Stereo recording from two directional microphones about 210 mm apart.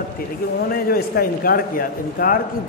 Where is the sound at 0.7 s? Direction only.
45° left (ahead or behind).